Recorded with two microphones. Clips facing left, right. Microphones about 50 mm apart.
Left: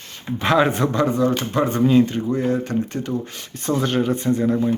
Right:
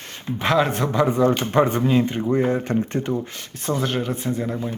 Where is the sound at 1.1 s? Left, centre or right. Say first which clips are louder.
Right 1 dB; centre.